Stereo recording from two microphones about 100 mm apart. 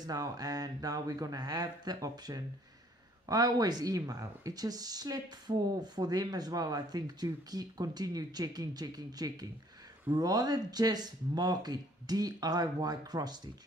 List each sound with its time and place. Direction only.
0.0 s speech: 40° right (ahead or behind)